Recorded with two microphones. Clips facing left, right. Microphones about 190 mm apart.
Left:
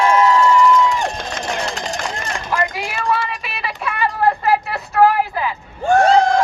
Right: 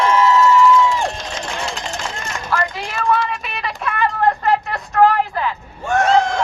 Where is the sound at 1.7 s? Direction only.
60° left (ahead or behind).